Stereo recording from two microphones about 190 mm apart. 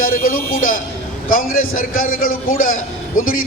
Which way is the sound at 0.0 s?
45° left (ahead or behind).